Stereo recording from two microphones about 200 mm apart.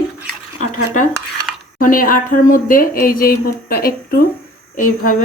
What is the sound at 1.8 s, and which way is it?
Speech, 45° left (ahead or behind).